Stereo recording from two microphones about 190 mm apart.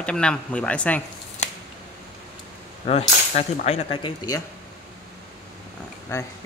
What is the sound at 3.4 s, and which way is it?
Speech, 35° left (ahead or behind).